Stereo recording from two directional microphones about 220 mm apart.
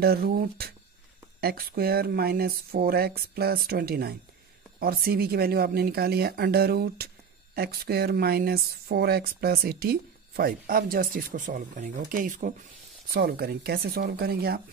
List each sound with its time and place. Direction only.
0.0 s speech: 45° right (ahead or behind)